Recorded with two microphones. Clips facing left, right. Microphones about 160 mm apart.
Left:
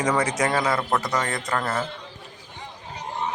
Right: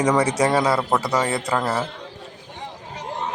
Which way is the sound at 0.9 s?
10° right (ahead or behind).